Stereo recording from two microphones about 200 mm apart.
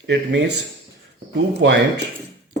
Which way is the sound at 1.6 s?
70° right (ahead or behind).